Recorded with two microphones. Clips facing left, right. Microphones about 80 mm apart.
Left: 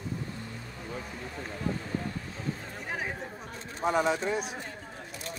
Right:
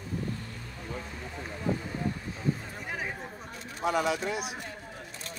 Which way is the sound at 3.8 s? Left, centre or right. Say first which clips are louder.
Left 1 dB; left.